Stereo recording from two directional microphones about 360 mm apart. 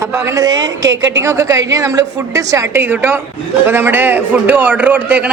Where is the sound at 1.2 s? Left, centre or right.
Centre.